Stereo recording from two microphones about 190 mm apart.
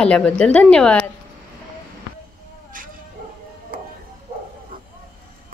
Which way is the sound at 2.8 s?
45° right (ahead or behind).